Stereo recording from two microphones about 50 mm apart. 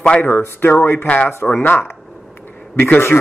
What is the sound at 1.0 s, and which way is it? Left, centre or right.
Speech, left.